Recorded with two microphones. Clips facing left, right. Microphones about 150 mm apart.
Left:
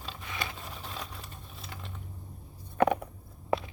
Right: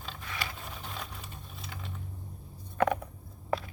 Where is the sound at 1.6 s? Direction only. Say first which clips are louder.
Right 1 dB; centre (ahead or behind).